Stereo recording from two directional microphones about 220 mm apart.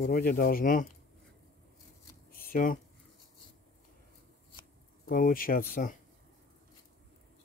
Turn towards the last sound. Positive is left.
turn(degrees=40)  # may be behind; listen again after turning